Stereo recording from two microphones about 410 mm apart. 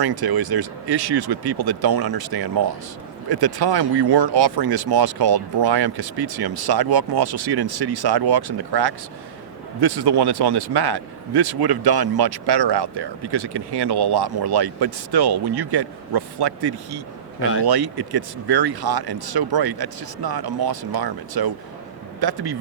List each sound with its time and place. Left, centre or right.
0.0 s speech: right